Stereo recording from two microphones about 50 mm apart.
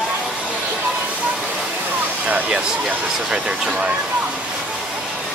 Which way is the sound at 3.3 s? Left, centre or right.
Centre.